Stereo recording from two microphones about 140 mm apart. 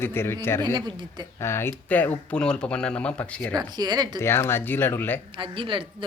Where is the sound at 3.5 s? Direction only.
30° right (ahead or behind).